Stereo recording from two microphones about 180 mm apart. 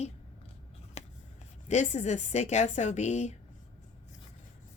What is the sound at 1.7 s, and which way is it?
A woman's voice, 40° left (ahead or behind).